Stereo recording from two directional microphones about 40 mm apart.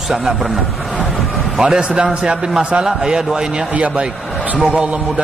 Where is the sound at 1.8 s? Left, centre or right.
Right.